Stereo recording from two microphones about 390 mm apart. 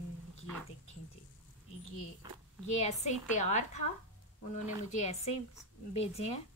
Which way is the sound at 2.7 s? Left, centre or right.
Centre.